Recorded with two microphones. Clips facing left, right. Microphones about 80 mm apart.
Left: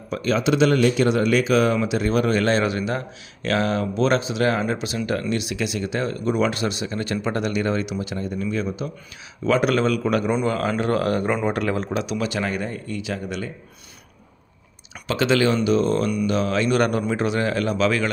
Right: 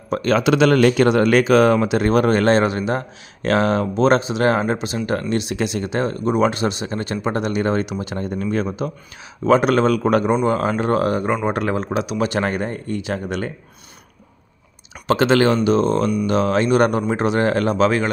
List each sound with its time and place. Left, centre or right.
0.1 s speech: right
12.2 s speech: right
15.0 s speech: right